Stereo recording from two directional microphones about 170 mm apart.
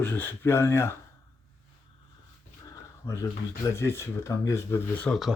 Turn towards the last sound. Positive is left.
turn(degrees=5)  # may be behind; listen again after turning